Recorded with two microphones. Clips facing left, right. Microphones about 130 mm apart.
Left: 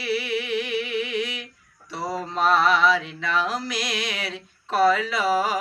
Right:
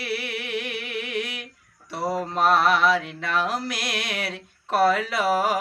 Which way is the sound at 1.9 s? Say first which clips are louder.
Right 3 dB; 60° right (ahead or behind).